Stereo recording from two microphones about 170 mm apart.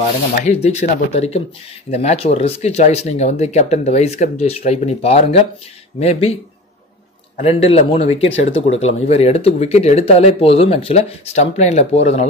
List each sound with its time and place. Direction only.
0.5 s speech: 40° left (ahead or behind)
7.3 s speech: 35° left (ahead or behind)